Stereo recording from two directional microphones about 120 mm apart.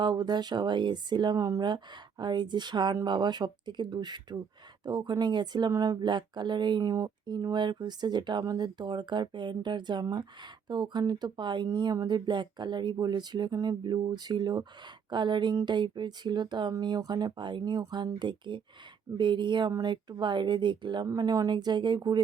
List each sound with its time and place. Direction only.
0.0 s speech: 35° right (ahead or behind)